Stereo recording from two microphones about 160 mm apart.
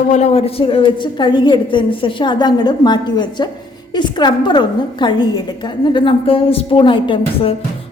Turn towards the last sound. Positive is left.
turn(degrees=35)  # may be behind; listen again after turning